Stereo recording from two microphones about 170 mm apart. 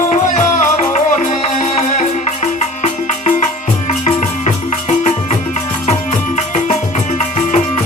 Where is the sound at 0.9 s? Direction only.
45° left (ahead or behind).